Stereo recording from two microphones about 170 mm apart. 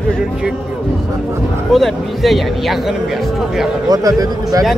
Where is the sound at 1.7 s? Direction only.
Centre (ahead or behind).